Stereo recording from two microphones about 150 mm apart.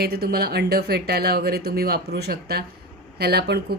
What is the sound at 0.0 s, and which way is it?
Speech, 90° right.